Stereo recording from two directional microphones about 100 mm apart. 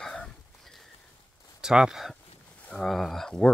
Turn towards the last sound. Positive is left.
turn(degrees=5)  # may be behind; listen again after turning